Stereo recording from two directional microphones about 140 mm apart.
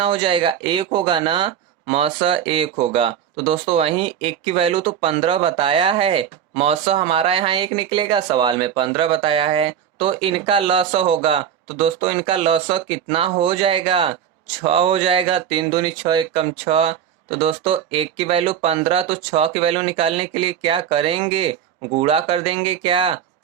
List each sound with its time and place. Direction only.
0.0 s speech: 40° right (ahead or behind)